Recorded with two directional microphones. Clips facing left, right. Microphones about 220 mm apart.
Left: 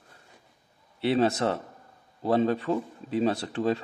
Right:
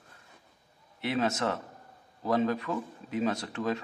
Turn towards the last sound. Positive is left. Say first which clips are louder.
# left 5 dB
turn(degrees=30)  # may be behind; listen again after turning